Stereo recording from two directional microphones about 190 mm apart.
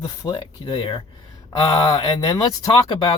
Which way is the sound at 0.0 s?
20° left (ahead or behind).